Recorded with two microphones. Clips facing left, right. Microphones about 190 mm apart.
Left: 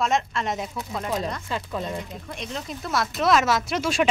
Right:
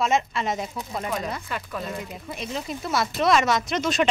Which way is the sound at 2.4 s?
5° right (ahead or behind).